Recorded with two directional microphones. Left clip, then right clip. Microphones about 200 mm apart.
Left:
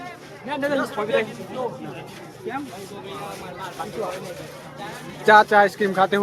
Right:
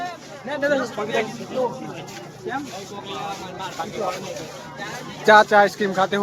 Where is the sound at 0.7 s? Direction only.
30° left (ahead or behind).